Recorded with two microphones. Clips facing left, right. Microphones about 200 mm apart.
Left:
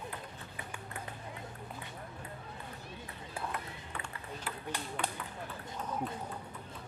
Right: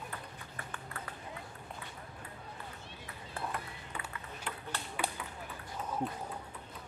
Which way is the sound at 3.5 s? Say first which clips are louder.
Even; centre (ahead or behind).